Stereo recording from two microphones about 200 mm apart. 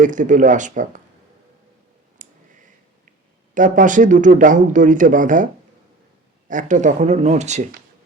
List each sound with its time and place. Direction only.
0.0 s speech: 40° right (ahead or behind)
2.2 s a sound: 40° right (ahead or behind)
3.5 s speech: 40° right (ahead or behind)
6.5 s speech: 40° right (ahead or behind)